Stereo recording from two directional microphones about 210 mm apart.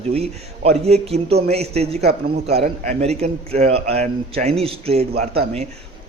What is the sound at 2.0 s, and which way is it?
Speech, 50° right (ahead or behind).